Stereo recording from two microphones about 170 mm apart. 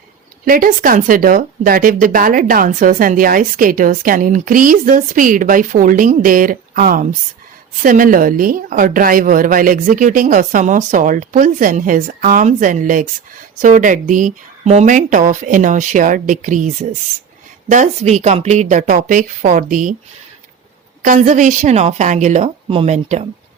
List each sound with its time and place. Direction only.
0.4 s a woman's voice: 55° right (ahead or behind)
21.0 s a woman's voice: 50° right (ahead or behind)